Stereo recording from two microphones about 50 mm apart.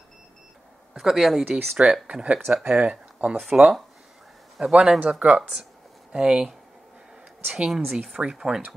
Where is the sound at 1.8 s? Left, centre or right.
Right.